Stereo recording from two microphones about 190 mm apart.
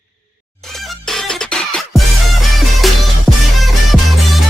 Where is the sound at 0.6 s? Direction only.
Centre (ahead or behind).